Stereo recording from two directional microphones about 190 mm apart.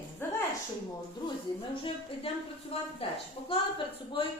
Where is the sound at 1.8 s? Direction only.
30° left (ahead or behind).